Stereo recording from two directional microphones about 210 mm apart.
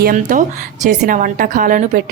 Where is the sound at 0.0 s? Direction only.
40° right (ahead or behind).